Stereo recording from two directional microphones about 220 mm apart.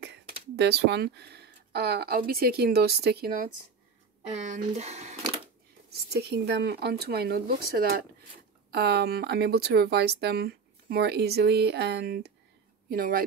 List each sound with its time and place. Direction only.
0.6 s speech: 50° right (ahead or behind)
4.3 s speech: 30° right (ahead or behind)
5.9 s speech: 50° right (ahead or behind)